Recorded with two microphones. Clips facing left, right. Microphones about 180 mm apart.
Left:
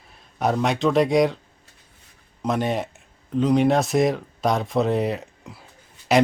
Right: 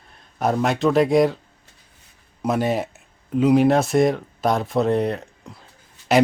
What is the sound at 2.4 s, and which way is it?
Speech, 5° right (ahead or behind).